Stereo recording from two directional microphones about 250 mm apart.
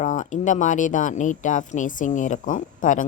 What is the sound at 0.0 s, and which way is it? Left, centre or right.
A woman's voice, left.